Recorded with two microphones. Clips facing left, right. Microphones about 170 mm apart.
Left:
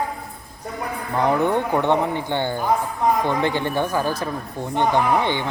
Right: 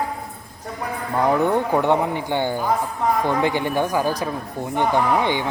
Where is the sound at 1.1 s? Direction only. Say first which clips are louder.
Right 1 dB; 10° right (ahead or behind).